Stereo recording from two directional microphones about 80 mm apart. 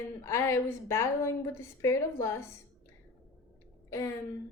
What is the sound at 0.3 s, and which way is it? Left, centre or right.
A woman's voice, left.